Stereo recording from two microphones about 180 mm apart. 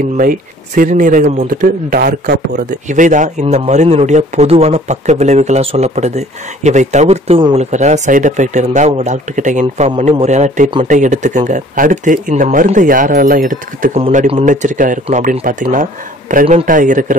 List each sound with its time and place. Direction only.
0.2 s speech: 50° right (ahead or behind)
2.9 s speech: 45° right (ahead or behind)
13.9 s speech: 35° right (ahead or behind)